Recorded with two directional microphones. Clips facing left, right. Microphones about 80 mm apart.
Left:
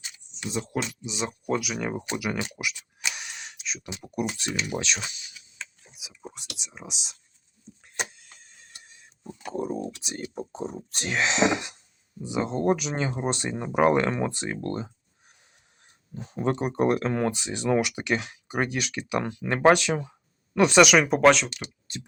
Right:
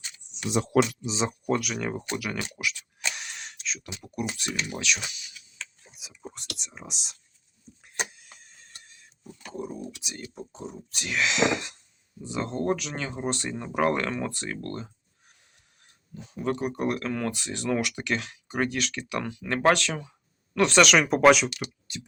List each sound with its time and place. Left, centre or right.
0.5 s speech: right
1.0 s speech: right
1.5 s speech: centre
3.8 s speech: left
5.8 s speech: centre
7.9 s a sound: centre
8.8 s a sound: centre
9.6 s speech: left; by 14.9 s centre
16.1 s speech: left; by 21.5 s centre